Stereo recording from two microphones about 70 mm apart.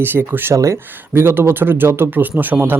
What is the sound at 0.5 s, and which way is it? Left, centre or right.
Speech, right.